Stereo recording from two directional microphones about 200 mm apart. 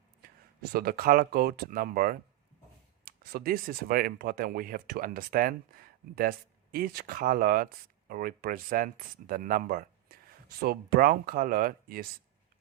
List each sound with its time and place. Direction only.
0.2 s speech: 50° right (ahead or behind)